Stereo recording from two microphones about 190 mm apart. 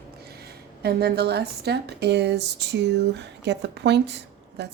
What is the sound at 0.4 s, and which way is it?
Speech, 55° right (ahead or behind).